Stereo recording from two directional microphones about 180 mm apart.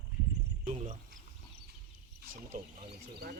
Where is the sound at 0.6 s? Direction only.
40° right (ahead or behind).